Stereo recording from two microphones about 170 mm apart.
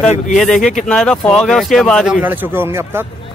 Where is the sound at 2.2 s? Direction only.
10° right (ahead or behind).